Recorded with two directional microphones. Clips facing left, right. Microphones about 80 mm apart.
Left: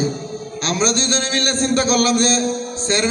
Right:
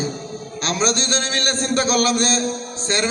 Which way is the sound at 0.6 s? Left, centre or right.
Right.